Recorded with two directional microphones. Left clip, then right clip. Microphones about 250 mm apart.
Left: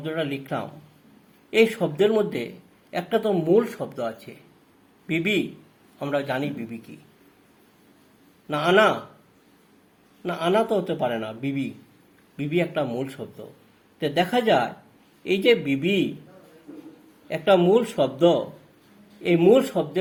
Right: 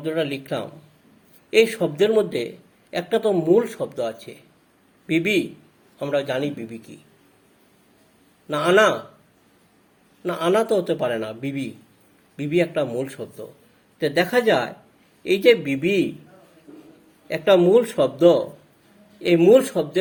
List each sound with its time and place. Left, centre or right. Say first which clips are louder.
0.0 s a man's voice: right 4 dB; right
8.4 s speech: right 2 dB; right
10.2 s speech: right 2 dB; right
17.2 s speech: right 2 dB; right